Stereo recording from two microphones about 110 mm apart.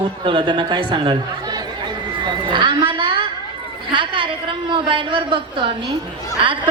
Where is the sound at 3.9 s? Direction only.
50° right (ahead or behind).